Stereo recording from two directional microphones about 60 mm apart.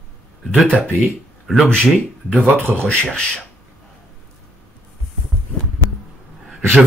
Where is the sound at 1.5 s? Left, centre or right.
Centre.